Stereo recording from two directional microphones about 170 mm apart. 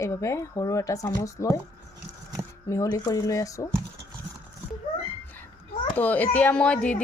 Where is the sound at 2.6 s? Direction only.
20° left (ahead or behind).